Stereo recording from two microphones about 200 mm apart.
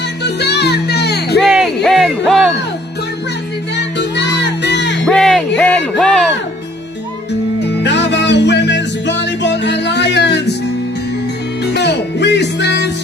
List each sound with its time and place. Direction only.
0.2 s music: 55° left (ahead or behind)
1.4 s music: centre (ahead or behind)
3.7 s music: 60° left (ahead or behind)
5.0 s music: centre (ahead or behind)
7.6 s music: 60° left (ahead or behind)
11.6 s music: 55° left (ahead or behind)